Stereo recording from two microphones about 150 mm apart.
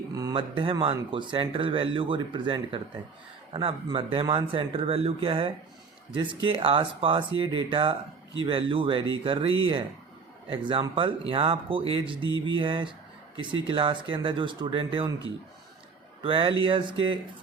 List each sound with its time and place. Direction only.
0.1 s a sound: 25° right (ahead or behind)
0.3 s speech: 35° right (ahead or behind)
16.2 s speech: 35° right (ahead or behind)